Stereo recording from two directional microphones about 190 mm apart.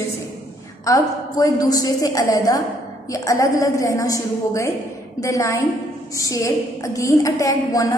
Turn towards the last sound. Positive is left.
turn(degrees=20)  # may be behind; listen again after turning